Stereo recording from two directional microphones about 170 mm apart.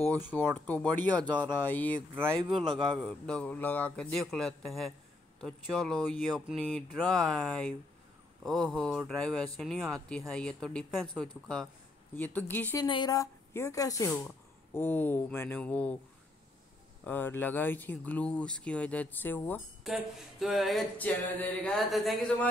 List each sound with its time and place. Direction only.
0.6 s speech: 10° left (ahead or behind)
3.1 s a sound: 5° left (ahead or behind)
12.2 s speech: 10° left (ahead or behind)
12.8 s a woman's voice: 25° left (ahead or behind); by 16.0 s 10° left (ahead or behind)
17.0 s speech: 10° left (ahead or behind)
19.8 s a sound: centre (ahead or behind)